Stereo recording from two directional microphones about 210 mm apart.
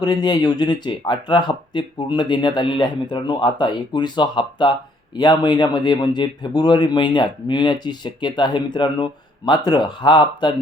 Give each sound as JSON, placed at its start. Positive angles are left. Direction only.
{"t": 0.0, "sound": "speech", "side_deg": 20}